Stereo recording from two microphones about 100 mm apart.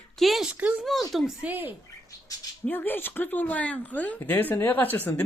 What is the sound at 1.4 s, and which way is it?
Speech, 20° right (ahead or behind).